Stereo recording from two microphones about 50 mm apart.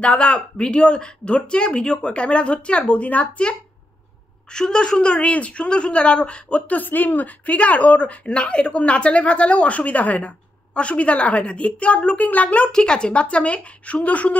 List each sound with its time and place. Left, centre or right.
0.0 s a woman's voice: left
4.5 s a woman's voice: centre
12.7 s a woman's voice: centre